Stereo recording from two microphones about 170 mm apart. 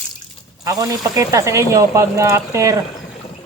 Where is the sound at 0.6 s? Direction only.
20° right (ahead or behind).